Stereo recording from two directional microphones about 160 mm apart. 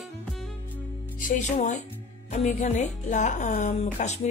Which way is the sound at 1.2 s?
50° left (ahead or behind).